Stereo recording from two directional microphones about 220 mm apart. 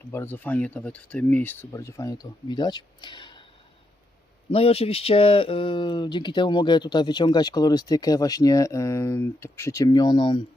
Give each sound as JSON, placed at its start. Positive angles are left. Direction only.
{"t": 0.1, "sound": "speech", "side_deg": 10}
{"t": 4.5, "sound": "speech", "side_deg": 25}